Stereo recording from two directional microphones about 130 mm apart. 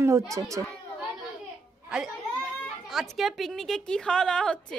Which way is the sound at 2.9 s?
Centre (ahead or behind).